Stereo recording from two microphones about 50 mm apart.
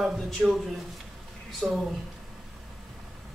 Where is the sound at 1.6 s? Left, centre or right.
Right.